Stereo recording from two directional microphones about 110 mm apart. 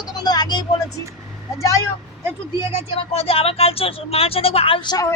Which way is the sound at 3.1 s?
60° left (ahead or behind).